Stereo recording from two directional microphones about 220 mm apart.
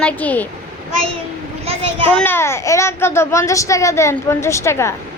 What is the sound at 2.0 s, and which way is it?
A woman's voice, 10° left (ahead or behind).